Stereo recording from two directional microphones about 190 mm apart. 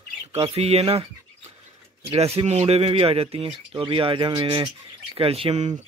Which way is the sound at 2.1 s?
30° right (ahead or behind).